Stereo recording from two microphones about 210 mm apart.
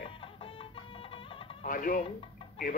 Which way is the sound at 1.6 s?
40° left (ahead or behind).